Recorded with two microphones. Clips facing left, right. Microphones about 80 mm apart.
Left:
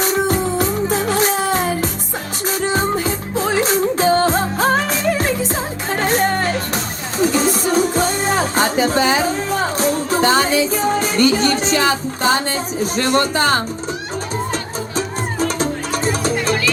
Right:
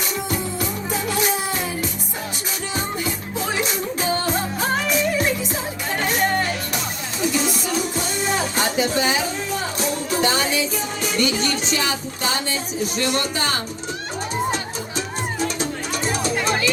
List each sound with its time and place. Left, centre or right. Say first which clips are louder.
0.0 s music: left 8 dB; left